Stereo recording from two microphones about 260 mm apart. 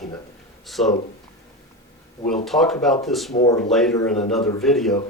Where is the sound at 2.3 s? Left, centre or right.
Centre.